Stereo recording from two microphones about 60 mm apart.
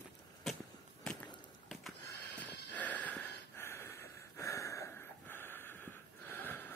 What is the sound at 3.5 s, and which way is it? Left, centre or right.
Snort, left.